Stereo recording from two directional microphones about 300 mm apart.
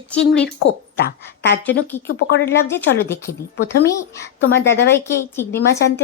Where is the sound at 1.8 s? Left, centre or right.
Centre.